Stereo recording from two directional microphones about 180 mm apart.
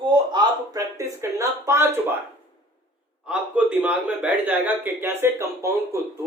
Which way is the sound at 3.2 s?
5° right (ahead or behind).